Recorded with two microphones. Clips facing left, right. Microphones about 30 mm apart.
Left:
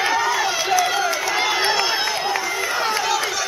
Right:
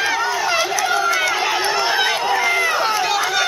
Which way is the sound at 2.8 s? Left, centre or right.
Centre.